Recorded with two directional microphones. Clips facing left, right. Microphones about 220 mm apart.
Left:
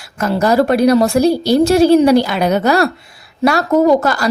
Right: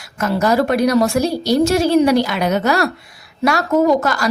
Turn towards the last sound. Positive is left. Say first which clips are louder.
# left 3 dB
turn(degrees=30)  # may be behind; listen again after turning